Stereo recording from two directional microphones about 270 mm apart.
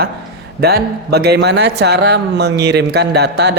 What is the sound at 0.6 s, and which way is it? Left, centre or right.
A man's voice, right.